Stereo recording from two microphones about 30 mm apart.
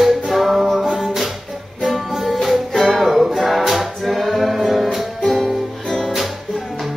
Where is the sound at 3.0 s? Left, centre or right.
Centre.